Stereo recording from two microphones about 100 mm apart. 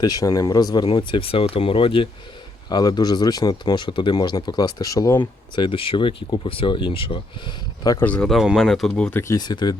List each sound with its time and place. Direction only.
0.0 s speech: 40° left (ahead or behind)
0.9 s speech: 60° left (ahead or behind)
2.6 s speech: 45° left (ahead or behind)
5.2 s speech: 55° left (ahead or behind)
8.0 s speech: 10° left (ahead or behind)
8.3 s speech: centre (ahead or behind)
9.4 s speech: 45° left (ahead or behind)